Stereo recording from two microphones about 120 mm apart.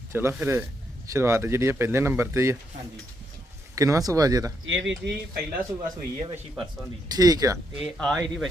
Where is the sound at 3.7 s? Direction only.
25° right (ahead or behind).